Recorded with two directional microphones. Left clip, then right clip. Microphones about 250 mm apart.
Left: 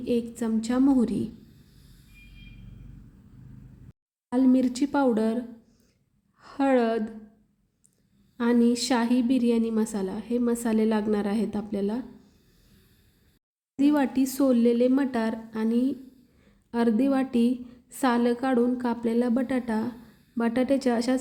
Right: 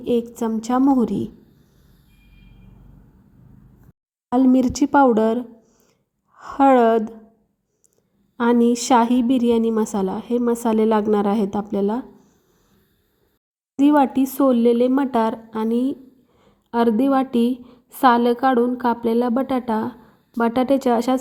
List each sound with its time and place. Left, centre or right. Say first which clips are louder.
0.0 s a woman's voice: right 7 dB; centre
4.3 s a woman's voice: right 6 dB; right
6.4 s a woman's voice: right 9 dB; right
8.4 s a woman's voice: right 6 dB; centre
13.7 s a woman's voice: right 8 dB; centre